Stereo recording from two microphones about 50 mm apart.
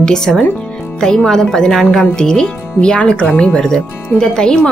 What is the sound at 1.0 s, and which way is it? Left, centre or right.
Speech, centre.